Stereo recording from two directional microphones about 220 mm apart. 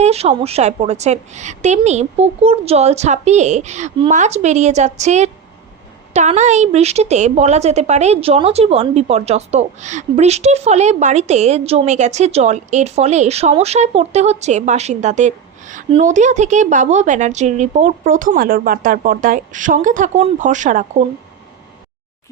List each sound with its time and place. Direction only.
0.0 s a woman's voice: 30° right (ahead or behind)